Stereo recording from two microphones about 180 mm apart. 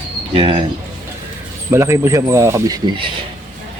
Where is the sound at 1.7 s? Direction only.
15° right (ahead or behind).